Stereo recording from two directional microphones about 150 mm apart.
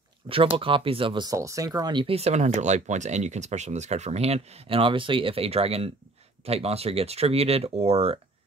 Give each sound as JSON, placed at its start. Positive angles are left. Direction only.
{"t": 0.2, "sound": "speech", "side_deg": -35}